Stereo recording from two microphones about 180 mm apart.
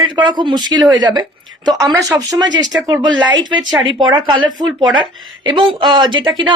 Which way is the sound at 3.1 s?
90° right.